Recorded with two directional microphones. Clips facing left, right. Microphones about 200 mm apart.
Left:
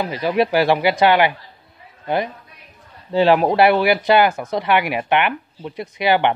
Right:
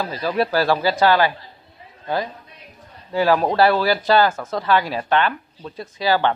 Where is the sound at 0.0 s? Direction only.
15° left (ahead or behind).